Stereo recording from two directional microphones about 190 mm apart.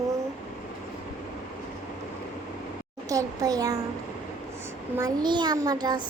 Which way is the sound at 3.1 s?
20° right (ahead or behind).